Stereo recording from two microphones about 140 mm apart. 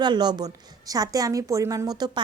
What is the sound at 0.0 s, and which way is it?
A woman's voice, 30° right (ahead or behind).